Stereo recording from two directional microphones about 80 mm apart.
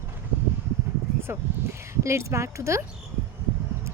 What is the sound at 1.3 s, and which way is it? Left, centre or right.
Speech, right.